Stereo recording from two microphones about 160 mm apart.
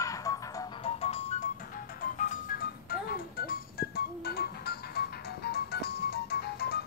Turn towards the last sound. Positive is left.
turn(degrees=80)